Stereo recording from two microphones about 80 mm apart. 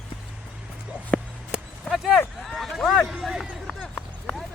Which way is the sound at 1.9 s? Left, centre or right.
Centre.